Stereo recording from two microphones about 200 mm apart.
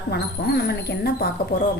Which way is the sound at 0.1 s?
55° left (ahead or behind).